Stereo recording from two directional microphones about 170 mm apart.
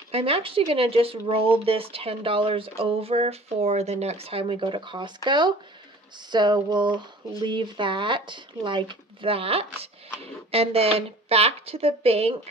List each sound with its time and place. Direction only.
0.1 s speech: 35° right (ahead or behind)